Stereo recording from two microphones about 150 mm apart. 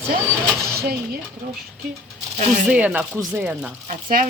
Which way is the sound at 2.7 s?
10° right (ahead or behind).